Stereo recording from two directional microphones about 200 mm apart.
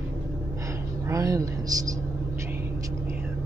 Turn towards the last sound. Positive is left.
turn(degrees=-15)  # may be behind; listen again after turning